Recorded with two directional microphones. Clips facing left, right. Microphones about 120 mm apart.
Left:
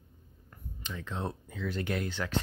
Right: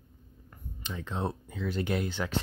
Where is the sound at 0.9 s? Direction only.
20° right (ahead or behind).